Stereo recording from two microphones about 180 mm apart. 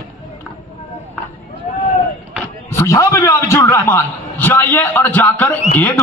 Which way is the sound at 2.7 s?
15° left (ahead or behind).